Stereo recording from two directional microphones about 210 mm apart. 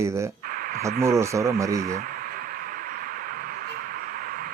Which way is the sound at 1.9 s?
40° right (ahead or behind).